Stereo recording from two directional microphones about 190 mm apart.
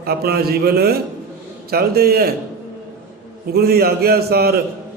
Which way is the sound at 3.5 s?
55° right (ahead or behind).